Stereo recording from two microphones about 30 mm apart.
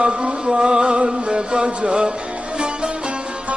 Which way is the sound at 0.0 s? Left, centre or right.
Right.